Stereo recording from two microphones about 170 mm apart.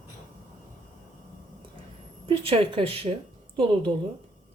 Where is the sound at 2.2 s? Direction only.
35° right (ahead or behind).